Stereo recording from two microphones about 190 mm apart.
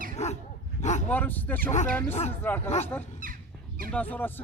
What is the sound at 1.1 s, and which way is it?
Speech, 10° left (ahead or behind).